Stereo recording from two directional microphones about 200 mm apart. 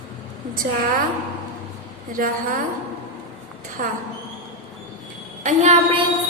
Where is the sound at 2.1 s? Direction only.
45° right (ahead or behind).